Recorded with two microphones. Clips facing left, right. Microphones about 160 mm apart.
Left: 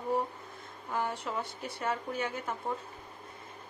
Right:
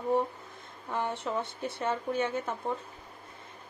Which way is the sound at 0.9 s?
20° right (ahead or behind).